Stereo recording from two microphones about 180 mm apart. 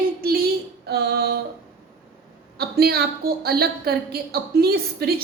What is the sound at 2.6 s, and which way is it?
A woman's voice, 60° right (ahead or behind).